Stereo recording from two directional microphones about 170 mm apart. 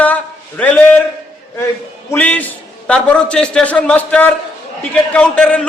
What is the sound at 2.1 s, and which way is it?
A man's voice, 10° left (ahead or behind).